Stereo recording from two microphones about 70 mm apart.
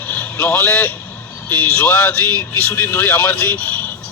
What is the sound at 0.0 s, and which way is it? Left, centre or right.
Vehicle, left.